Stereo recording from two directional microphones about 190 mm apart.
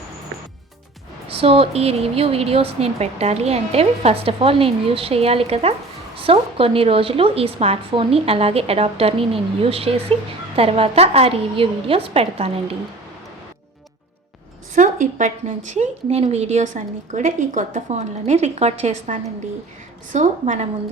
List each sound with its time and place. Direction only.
1.3 s a woman's voice: 30° right (ahead or behind)
14.8 s a woman's voice: 40° right (ahead or behind)